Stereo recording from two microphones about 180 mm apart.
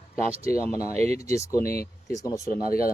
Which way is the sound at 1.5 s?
55° left (ahead or behind).